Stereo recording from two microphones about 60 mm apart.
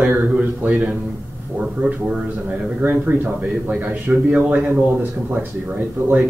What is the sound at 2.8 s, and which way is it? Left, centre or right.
A man's voice, right.